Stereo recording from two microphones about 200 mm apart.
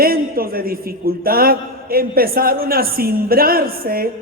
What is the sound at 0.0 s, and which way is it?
A man's voice, 45° right (ahead or behind).